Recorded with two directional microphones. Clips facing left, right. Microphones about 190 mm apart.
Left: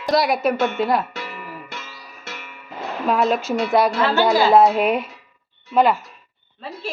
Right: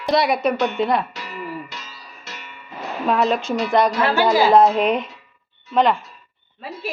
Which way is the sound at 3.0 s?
Centre (ahead or behind).